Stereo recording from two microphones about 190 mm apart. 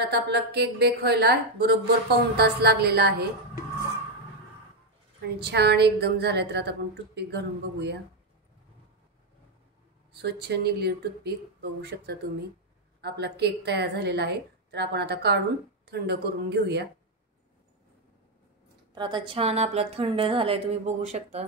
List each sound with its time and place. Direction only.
0.1 s a woman's voice: 60° right (ahead or behind)
5.4 s a woman's voice: 60° right (ahead or behind)
10.1 s a woman's voice: 60° right (ahead or behind)
13.0 s a woman's voice: 60° right (ahead or behind)
18.9 s speech: 25° right (ahead or behind)